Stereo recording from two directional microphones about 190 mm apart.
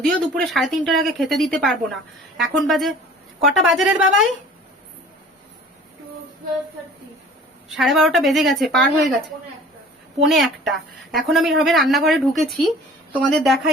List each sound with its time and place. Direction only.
0.0 s a woman's voice: centre (ahead or behind)
7.7 s a woman's voice: centre (ahead or behind)
10.2 s a woman's voice: centre (ahead or behind)